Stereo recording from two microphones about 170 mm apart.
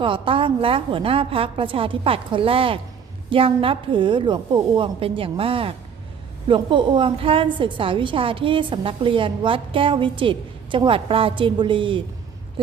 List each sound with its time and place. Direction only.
0.0 s a woman's voice: 30° right (ahead or behind)